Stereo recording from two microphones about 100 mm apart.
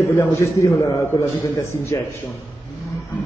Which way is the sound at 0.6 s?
30° left (ahead or behind).